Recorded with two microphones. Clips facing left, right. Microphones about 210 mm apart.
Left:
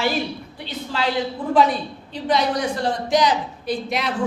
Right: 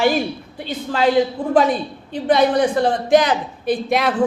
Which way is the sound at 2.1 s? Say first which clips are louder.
Right 5 dB; 55° right (ahead or behind).